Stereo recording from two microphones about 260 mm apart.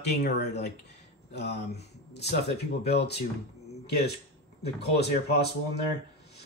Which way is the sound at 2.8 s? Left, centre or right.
Left.